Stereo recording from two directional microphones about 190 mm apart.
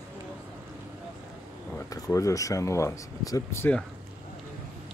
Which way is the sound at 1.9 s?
15° left (ahead or behind).